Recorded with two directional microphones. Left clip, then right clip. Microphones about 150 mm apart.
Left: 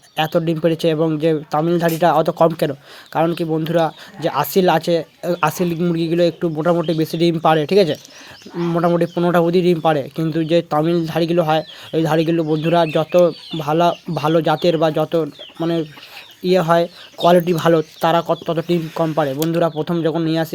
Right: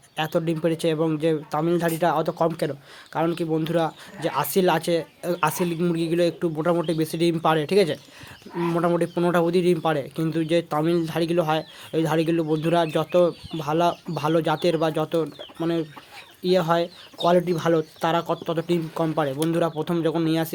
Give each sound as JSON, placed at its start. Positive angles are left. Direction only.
{"t": 0.2, "sound": "speech", "side_deg": 30}
{"t": 17.2, "sound": "speech", "side_deg": 50}